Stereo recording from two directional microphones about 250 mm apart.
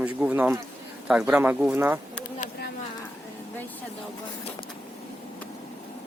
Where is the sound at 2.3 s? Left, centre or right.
Left.